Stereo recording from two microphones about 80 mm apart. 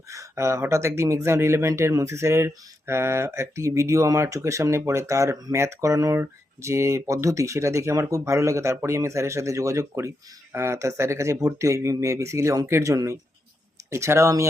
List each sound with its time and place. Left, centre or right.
0.1 s speech: right